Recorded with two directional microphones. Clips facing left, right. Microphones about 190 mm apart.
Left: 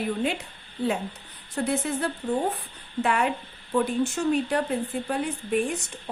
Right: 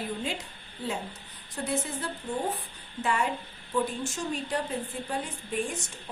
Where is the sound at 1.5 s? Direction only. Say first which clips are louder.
Left 5 dB; 60° left (ahead or behind).